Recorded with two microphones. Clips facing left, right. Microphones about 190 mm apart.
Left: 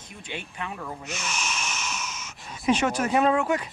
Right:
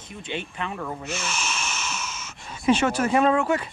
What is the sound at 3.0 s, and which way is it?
Speech, 5° left (ahead or behind).